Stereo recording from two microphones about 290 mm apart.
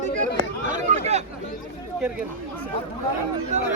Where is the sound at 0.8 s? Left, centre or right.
Right.